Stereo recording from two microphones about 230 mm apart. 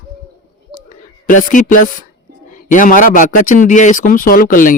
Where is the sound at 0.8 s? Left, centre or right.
Left.